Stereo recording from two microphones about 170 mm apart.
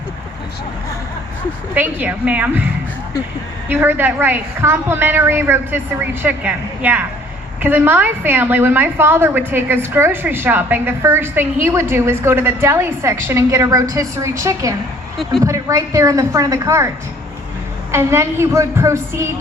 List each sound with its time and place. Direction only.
1.7 s a woman's voice: 10° right (ahead or behind)
3.7 s a woman's voice: 10° right (ahead or behind)
15.2 s a woman's voice: centre (ahead or behind)
15.4 s a woman's voice: 20° right (ahead or behind)
17.9 s a woman's voice: 15° right (ahead or behind)